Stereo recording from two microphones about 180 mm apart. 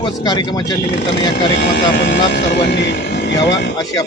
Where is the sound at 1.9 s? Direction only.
70° left (ahead or behind).